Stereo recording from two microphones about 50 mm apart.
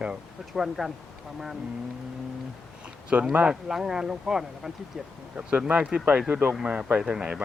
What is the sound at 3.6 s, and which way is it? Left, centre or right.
Speech, centre.